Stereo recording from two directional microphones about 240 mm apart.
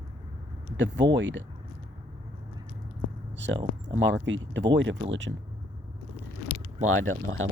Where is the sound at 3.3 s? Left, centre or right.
Right.